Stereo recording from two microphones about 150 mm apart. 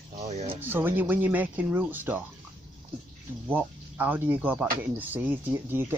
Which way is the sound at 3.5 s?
15° right (ahead or behind).